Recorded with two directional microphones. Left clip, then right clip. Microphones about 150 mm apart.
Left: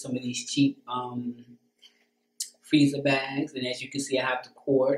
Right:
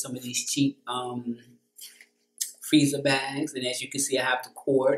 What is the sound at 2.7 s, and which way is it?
Speech, 10° right (ahead or behind).